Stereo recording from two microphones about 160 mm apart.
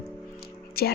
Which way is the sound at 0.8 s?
75° left (ahead or behind).